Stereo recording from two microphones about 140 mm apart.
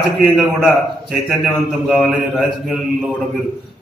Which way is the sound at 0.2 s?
Centre (ahead or behind).